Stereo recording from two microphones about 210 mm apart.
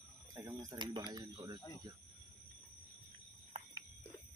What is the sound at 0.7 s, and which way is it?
Speech, 20° right (ahead or behind).